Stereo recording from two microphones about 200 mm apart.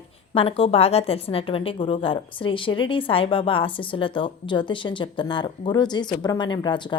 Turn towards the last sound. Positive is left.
turn(degrees=20)  # may be behind; listen again after turning